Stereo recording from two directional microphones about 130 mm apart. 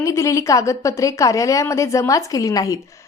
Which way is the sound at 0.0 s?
25° left (ahead or behind).